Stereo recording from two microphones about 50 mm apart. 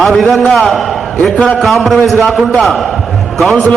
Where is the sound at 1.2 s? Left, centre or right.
Centre.